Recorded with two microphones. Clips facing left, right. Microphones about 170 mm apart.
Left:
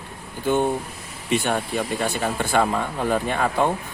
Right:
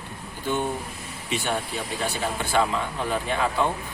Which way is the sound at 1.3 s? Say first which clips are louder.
Left 5 dB; 55° left (ahead or behind).